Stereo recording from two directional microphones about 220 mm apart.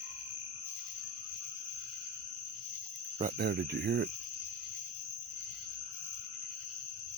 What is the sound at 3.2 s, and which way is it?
Speech, 45° right (ahead or behind).